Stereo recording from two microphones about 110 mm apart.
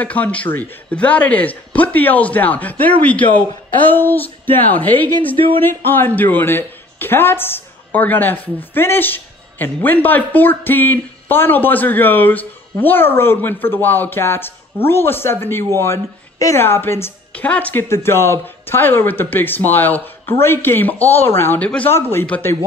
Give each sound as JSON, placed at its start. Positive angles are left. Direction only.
{"t": 0.0, "sound": "a man's voice", "side_deg": 15}
{"t": 17.3, "sound": "a man's voice", "side_deg": 10}
{"t": 21.9, "sound": "speech", "side_deg": 25}